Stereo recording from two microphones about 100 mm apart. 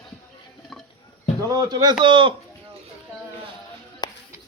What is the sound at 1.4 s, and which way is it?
Speech, 40° right (ahead or behind).